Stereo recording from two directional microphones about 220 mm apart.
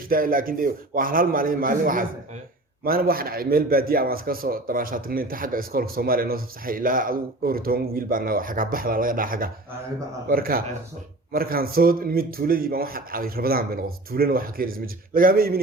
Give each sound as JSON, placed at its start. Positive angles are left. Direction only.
{"t": 0.1, "sound": "a man's voice", "side_deg": -40}